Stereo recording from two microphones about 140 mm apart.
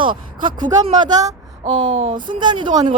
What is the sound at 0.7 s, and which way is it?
Speech, 25° right (ahead or behind).